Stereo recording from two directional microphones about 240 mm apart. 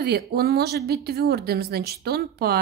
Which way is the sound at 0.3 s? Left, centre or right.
Right.